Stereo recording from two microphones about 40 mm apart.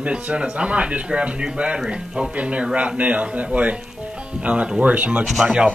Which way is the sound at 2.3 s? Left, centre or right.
Right.